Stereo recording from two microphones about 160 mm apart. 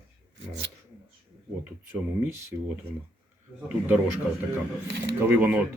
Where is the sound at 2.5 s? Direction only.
15° right (ahead or behind).